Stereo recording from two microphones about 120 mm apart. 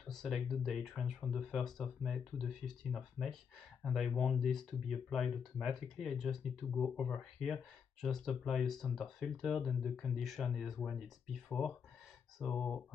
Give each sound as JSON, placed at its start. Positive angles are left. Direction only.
{"t": 0.1, "sound": "speech", "side_deg": 0}
{"t": 6.7, "sound": "speech", "side_deg": 15}
{"t": 7.2, "sound": "speech", "side_deg": 0}